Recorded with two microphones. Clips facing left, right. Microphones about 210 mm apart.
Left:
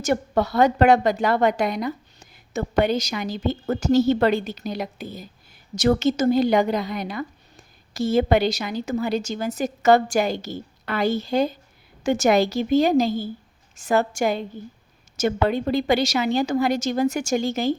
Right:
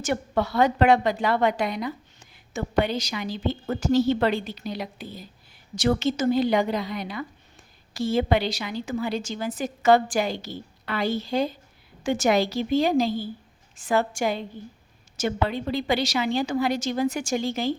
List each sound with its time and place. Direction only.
0.0 s a woman's voice: 40° left (ahead or behind)